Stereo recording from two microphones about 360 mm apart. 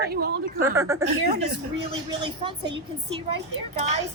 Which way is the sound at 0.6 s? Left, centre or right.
Centre.